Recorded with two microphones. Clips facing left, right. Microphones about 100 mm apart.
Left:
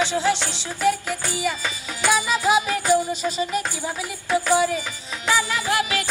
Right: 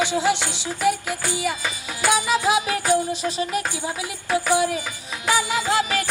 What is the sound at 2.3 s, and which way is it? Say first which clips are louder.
Music: even; 5° right (ahead or behind).